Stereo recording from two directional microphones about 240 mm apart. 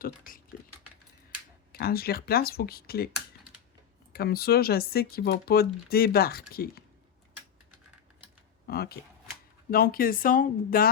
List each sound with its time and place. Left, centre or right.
1.7 s speech: left
4.1 s speech: left
8.6 s speech: left